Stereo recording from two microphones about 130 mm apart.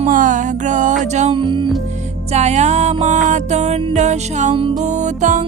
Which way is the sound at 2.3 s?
60° right (ahead or behind).